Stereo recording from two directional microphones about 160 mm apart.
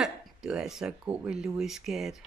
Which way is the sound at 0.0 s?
5° right (ahead or behind).